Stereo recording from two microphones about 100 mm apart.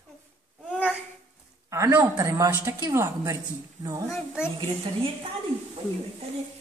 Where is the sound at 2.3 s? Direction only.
30° right (ahead or behind).